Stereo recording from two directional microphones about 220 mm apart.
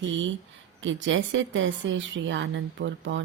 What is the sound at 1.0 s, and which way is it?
A woman's voice, 60° right (ahead or behind).